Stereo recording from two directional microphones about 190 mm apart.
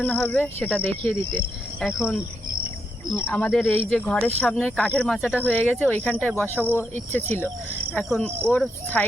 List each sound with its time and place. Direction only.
0.0 s speech: 5° left (ahead or behind)
1.8 s speech: 5° right (ahead or behind)
3.2 s speech: 5° left (ahead or behind)